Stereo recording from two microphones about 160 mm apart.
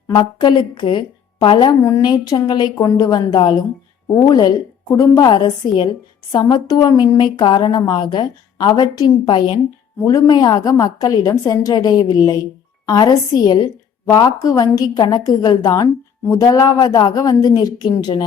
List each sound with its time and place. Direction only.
0.1 s a woman's voice: 25° left (ahead or behind)